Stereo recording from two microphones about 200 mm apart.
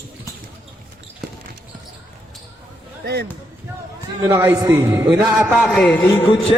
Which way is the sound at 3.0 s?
55° right (ahead or behind).